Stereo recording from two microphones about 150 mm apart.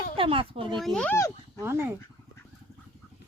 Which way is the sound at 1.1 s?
15° left (ahead or behind).